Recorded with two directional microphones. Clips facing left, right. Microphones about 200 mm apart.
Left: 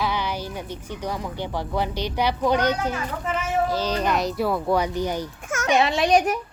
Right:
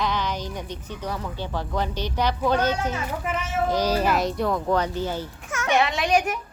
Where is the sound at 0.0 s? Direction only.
10° left (ahead or behind).